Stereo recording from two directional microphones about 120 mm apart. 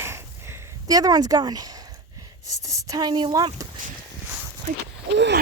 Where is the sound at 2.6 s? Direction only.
30° right (ahead or behind).